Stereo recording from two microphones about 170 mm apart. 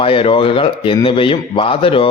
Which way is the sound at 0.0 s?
30° left (ahead or behind).